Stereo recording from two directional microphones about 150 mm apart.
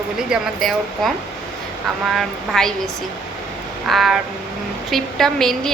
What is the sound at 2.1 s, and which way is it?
Speech, centre (ahead or behind).